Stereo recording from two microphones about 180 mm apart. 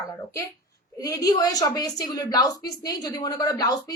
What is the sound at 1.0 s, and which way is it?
A woman's voice, 20° left (ahead or behind).